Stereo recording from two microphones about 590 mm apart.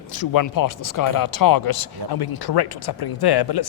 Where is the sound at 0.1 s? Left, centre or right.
Left.